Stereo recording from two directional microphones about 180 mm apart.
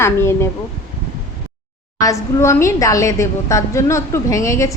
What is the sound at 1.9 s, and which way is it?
A woman's voice, 20° left (ahead or behind).